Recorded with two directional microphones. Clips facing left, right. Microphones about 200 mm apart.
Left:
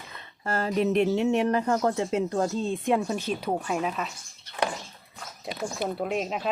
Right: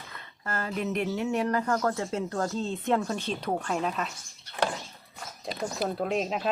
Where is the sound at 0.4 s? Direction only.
30° left (ahead or behind); by 4.1 s 5° left (ahead or behind).